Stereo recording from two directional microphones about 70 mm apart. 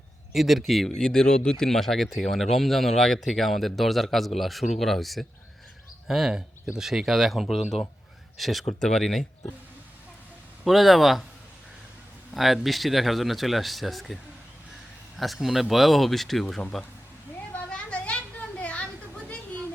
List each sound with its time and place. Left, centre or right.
0.3 s speech: centre
10.6 s speech: centre
12.3 s speech: centre
15.2 s speech: centre
17.7 s a sound: centre